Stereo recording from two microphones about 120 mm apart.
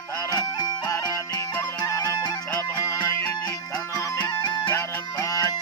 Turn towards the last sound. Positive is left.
turn(degrees=30)  # may be behind; listen again after turning